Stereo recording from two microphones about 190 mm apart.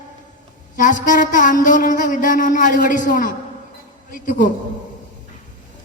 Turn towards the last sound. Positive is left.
turn(degrees=45)  # may be behind; listen again after turning